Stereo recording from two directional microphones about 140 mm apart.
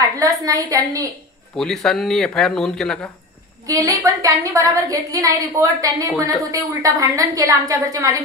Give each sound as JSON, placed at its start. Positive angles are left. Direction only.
{"t": 0.2, "sound": "a woman's voice", "side_deg": -25}
{"t": 1.6, "sound": "speech", "side_deg": 5}
{"t": 3.6, "sound": "a woman's voice", "side_deg": -25}